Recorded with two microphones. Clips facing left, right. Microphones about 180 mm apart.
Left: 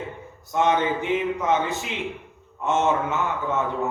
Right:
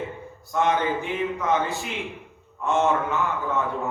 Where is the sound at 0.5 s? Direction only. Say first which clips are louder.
Left 1 dB; 20° left (ahead or behind).